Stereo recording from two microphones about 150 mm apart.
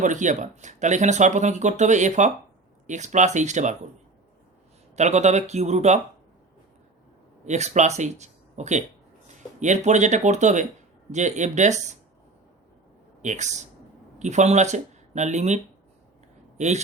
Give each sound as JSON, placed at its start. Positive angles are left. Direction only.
{"t": 0.0, "sound": "speech", "side_deg": -55}
{"t": 4.9, "sound": "speech", "side_deg": -50}
{"t": 7.4, "sound": "speech", "side_deg": -50}
{"t": 13.2, "sound": "speech", "side_deg": -50}